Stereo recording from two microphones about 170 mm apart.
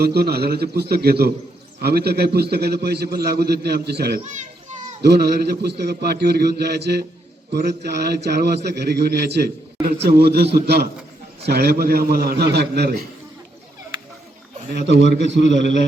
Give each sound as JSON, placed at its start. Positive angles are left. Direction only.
{"t": 0.0, "sound": "a man's voice", "side_deg": -70}
{"t": 14.7, "sound": "a man's voice", "side_deg": -85}